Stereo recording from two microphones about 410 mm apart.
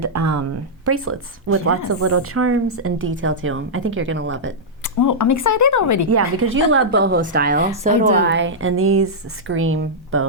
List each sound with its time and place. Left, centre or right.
0.0 s speech: right
4.9 s speech: left
6.4 s speech: right